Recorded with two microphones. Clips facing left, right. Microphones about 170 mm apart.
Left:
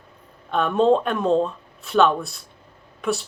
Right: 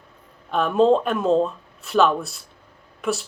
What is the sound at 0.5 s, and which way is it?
Speech, centre (ahead or behind).